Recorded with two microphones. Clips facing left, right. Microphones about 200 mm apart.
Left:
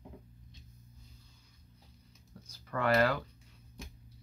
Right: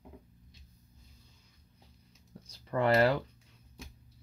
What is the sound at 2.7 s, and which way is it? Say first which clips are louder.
Speech: right 3 dB; 25° right (ahead or behind).